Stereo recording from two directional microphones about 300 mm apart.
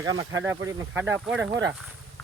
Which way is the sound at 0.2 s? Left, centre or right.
Centre.